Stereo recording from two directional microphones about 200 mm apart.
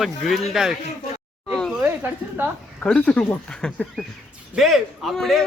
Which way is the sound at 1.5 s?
Centre (ahead or behind).